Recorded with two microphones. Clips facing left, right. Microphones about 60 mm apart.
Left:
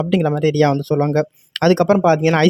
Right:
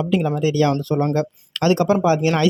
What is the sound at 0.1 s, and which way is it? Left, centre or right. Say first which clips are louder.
Speech: left 4 dB; left.